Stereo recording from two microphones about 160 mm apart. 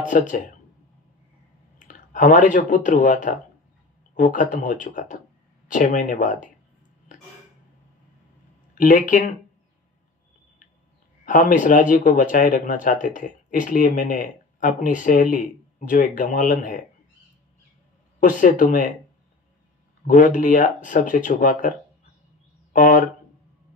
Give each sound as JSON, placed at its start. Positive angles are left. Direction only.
{"t": 0.1, "sound": "speech", "side_deg": 55}
{"t": 1.9, "sound": "speech", "side_deg": 55}
{"t": 8.7, "sound": "speech", "side_deg": 55}
{"t": 11.2, "sound": "speech", "side_deg": 55}
{"t": 18.4, "sound": "speech", "side_deg": 55}
{"t": 20.1, "sound": "speech", "side_deg": 55}